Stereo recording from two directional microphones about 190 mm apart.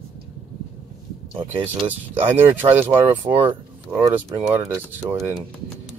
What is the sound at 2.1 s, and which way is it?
Speech, 10° right (ahead or behind).